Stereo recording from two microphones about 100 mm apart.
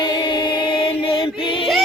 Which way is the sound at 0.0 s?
45° left (ahead or behind).